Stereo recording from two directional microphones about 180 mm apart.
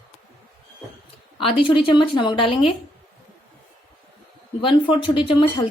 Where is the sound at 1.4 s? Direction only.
30° left (ahead or behind).